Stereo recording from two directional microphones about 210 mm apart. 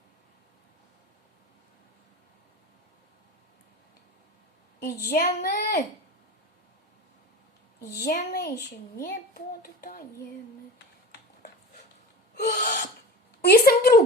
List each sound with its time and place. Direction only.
4.8 s a woman's voice: 45° left (ahead or behind)
7.8 s a woman's voice: 45° left (ahead or behind)
12.5 s owl: 40° left (ahead or behind)
13.4 s a woman's voice: 45° left (ahead or behind)